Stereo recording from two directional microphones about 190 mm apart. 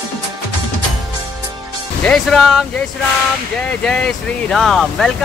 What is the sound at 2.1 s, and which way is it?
Speech, centre (ahead or behind).